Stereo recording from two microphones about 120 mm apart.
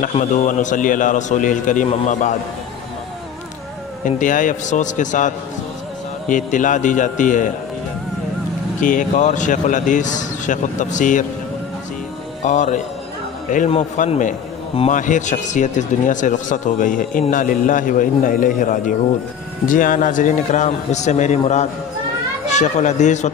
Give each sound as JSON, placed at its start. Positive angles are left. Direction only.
{"t": 0.1, "sound": "a man's voice", "side_deg": 90}
{"t": 4.0, "sound": "a man's voice", "side_deg": 90}
{"t": 8.8, "sound": "a man's voice", "side_deg": 90}
{"t": 12.4, "sound": "a man's voice", "side_deg": 90}
{"t": 13.7, "sound": "a man's voice", "side_deg": 75}